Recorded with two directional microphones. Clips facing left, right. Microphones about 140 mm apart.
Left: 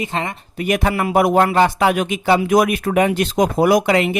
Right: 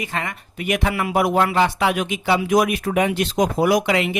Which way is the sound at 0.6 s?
40° left (ahead or behind).